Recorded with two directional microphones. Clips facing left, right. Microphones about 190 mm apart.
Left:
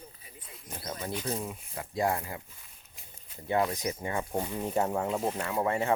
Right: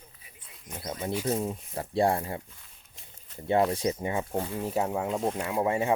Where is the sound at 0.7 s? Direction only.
20° right (ahead or behind).